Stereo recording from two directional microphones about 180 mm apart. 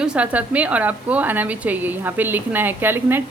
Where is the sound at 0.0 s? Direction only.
5° right (ahead or behind).